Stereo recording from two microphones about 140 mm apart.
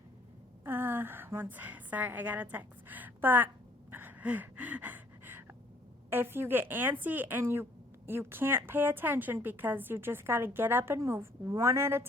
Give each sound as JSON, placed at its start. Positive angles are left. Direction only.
{"t": 0.6, "sound": "a woman's voice", "side_deg": -15}
{"t": 3.9, "sound": "a sound", "side_deg": -15}
{"t": 6.1, "sound": "speech", "side_deg": -15}